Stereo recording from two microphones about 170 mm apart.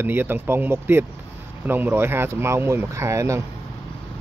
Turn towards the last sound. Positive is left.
turn(degrees=-15)  # may be behind; listen again after turning